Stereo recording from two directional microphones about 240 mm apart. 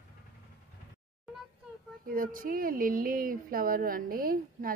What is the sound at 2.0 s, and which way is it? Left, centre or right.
Speech, right.